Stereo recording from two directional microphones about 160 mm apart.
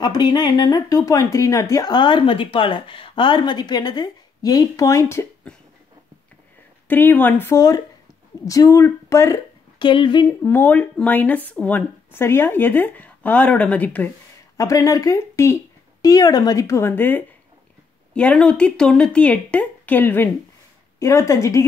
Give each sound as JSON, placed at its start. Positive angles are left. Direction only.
{"t": 0.0, "sound": "speech", "side_deg": 25}
{"t": 6.9, "sound": "speech", "side_deg": 10}
{"t": 9.8, "sound": "speech", "side_deg": 30}
{"t": 10.4, "sound": "speech", "side_deg": 10}
{"t": 14.6, "sound": "speech", "side_deg": 20}